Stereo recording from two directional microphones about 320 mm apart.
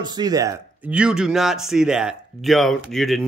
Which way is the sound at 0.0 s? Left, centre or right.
Centre.